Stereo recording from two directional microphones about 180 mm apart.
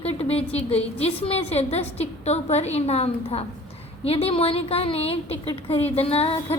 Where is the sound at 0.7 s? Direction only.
35° left (ahead or behind).